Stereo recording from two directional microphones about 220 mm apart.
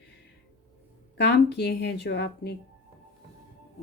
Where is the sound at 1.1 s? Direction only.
50° left (ahead or behind).